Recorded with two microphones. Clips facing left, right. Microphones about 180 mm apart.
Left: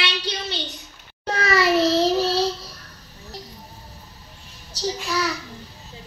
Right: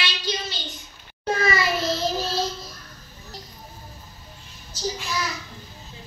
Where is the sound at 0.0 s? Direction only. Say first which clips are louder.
Left 2 dB; 65° left (ahead or behind).